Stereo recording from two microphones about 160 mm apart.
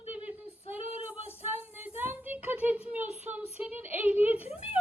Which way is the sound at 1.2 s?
40° left (ahead or behind).